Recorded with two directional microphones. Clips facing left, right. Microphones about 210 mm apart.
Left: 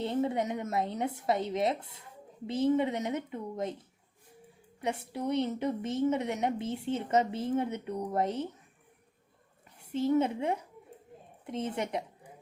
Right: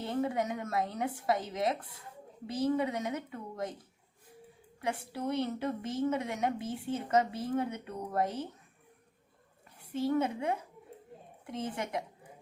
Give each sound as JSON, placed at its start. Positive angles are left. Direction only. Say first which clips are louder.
{"t": 0.0, "sound": "a woman's voice", "louder": "left 2 dB", "side_deg": 20}
{"t": 4.8, "sound": "a woman's voice", "louder": "left 2 dB", "side_deg": 20}
{"t": 9.9, "sound": "a woman's voice", "louder": "left 3 dB", "side_deg": 25}